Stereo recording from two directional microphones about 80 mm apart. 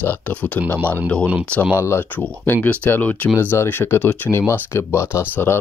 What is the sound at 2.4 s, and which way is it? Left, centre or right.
Speech, left.